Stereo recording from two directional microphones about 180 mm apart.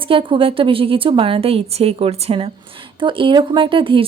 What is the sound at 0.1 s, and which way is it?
A woman's voice, 30° right (ahead or behind).